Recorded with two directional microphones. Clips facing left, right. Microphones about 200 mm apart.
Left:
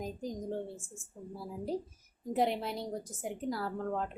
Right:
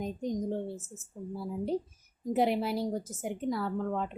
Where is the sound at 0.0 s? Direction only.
Centre (ahead or behind).